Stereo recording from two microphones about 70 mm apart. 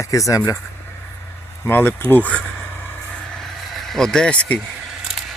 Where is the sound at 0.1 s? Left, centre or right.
Left.